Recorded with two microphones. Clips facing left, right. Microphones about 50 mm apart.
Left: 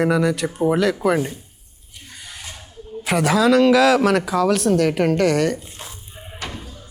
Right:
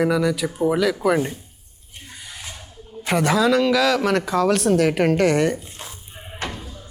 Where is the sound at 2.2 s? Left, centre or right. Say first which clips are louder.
Left 1 dB; centre.